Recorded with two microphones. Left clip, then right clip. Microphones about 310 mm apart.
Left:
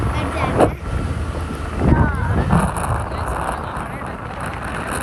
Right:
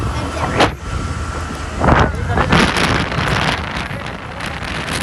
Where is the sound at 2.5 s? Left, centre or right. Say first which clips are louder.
Right 8 dB; centre.